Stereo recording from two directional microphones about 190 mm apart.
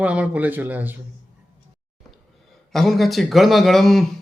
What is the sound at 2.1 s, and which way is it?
Speech, centre (ahead or behind).